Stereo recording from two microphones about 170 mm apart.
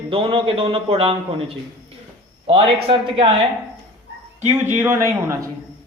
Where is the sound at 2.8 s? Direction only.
35° right (ahead or behind).